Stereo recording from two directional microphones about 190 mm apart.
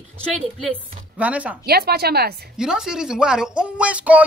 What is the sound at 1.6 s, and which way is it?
Speech, 55° right (ahead or behind).